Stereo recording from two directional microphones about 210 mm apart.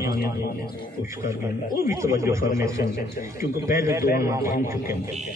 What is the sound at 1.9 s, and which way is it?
Speech, 15° right (ahead or behind).